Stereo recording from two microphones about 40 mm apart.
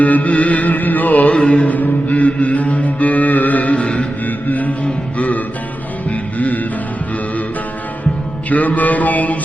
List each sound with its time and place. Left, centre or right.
0.0 s chant: left
1.3 s mantra: left
3.8 s a sound: left
4.3 s mantra: left
6.1 s music: left
8.4 s chant: left